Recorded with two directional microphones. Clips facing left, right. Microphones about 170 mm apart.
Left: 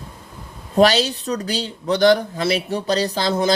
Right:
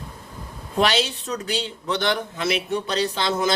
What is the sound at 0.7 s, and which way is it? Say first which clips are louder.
Speech: left 6 dB; 40° left (ahead or behind).